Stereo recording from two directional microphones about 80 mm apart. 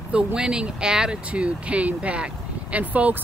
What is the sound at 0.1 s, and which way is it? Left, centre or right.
Speech, centre.